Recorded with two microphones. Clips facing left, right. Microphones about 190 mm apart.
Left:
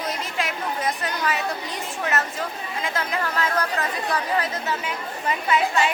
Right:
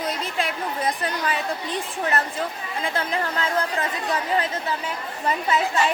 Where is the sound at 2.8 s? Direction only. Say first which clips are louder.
Right 1 dB; 30° right (ahead or behind).